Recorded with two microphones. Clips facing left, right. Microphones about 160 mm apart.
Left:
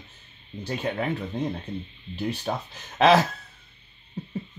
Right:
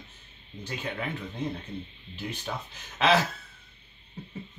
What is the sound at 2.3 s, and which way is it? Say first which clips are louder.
Speech: left 6 dB; 40° left (ahead or behind).